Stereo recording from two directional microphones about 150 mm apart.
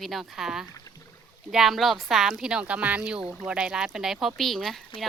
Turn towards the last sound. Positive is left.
turn(degrees=0)  # may be behind; listen again after turning